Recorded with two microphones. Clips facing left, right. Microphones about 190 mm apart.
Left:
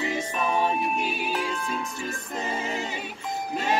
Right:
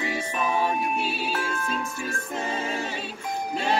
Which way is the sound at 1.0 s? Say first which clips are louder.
Even; 15° left (ahead or behind).